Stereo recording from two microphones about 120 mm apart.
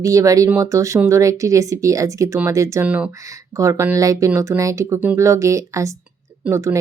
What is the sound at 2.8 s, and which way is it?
Speech, 10° right (ahead or behind).